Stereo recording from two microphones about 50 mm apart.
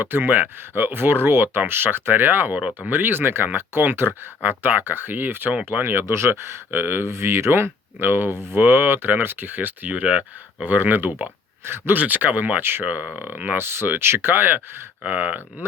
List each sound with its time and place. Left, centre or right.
0.0 s speech: right
2.6 s speech: right
2.9 s speech: right
6.7 s speech: right
7.1 s speech: right
11.9 s speech: right
13.6 s speech: right
15.0 s speech: right